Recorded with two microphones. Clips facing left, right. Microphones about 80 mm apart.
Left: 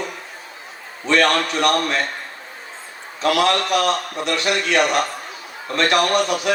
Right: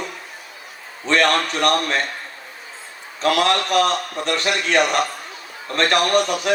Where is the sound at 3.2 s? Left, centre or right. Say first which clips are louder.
Even; right.